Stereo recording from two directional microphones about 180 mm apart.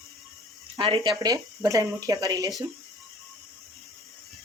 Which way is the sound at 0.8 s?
30° right (ahead or behind).